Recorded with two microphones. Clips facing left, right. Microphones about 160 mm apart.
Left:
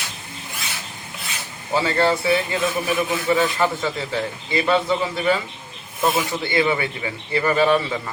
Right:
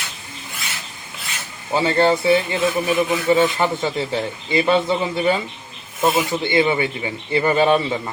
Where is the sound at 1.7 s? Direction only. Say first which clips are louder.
Right 3 dB; 25° right (ahead or behind).